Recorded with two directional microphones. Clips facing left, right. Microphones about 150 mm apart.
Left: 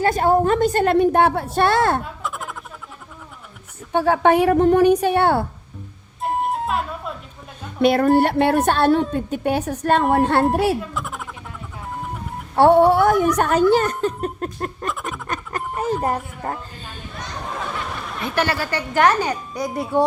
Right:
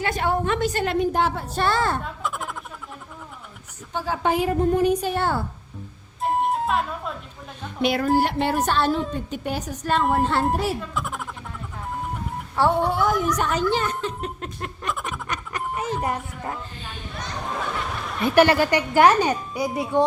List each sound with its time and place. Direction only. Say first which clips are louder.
0.0 s speech: left 7 dB; 40° left (ahead or behind); by 2.0 s 65° left (ahead or behind)
2.2 s a sound: even; centre (ahead or behind)
3.9 s a woman's voice: left 8 dB; 65° left (ahead or behind)
6.2 s music: even; centre (ahead or behind)
7.8 s a woman's voice: left 5 dB; 55° left (ahead or behind)
10.9 s a sound: even; centre (ahead or behind)
12.5 s speech: left 8 dB; 60° left (ahead or behind); by 14.8 s 45° left (ahead or behind)
15.3 s a sound: left 3 dB; 45° left (ahead or behind)
16.0 s speech: left 4 dB; 40° left (ahead or behind)
18.3 s a woman's voice: right 6 dB; 15° right (ahead or behind)
19.6 s speech: left 1 dB; centre (ahead or behind)